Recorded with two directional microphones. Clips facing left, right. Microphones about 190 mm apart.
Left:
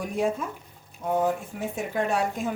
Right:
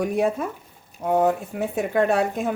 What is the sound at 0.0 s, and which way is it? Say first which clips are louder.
A woman's voice: right 5 dB; 65° right (ahead or behind).